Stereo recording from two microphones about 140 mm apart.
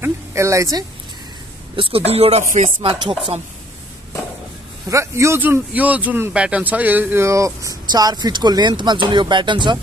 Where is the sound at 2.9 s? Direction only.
35° right (ahead or behind).